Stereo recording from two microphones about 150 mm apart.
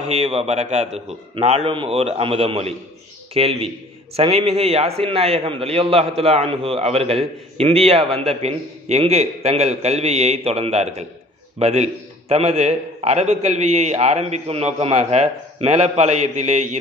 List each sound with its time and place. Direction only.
0.1 s a man's voice: 45° right (ahead or behind)